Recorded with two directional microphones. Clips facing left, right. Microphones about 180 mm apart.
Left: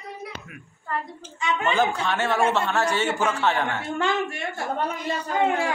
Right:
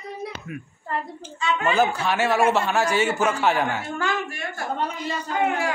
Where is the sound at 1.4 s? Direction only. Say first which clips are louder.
Right 1 dB; 20° left (ahead or behind).